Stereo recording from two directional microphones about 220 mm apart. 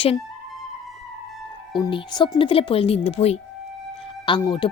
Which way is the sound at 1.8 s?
20° left (ahead or behind).